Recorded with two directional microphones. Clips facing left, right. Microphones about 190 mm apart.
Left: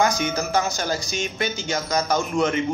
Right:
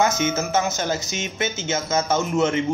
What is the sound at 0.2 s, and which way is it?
Speech, 20° right (ahead or behind).